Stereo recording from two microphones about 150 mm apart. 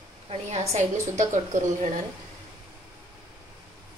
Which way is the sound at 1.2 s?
55° right (ahead or behind).